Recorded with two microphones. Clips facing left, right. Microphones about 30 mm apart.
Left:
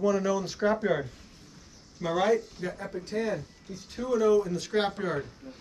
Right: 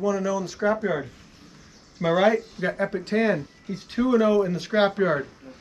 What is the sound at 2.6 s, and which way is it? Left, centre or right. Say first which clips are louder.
Speech: right 9 dB; right.